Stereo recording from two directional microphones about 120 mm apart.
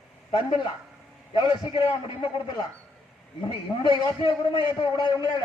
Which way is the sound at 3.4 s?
40° left (ahead or behind).